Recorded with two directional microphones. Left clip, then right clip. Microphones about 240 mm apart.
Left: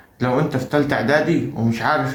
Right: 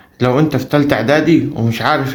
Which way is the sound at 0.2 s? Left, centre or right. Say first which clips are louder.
Right 6 dB; right.